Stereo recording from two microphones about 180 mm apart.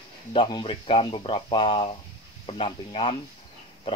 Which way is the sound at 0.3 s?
25° left (ahead or behind).